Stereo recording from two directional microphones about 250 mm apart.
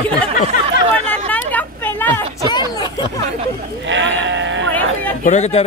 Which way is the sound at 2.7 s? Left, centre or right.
Centre.